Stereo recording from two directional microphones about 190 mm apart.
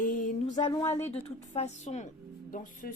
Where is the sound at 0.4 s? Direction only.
20° left (ahead or behind).